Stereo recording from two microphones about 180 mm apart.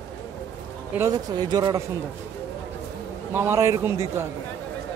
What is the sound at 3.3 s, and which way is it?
Speech, 15° right (ahead or behind).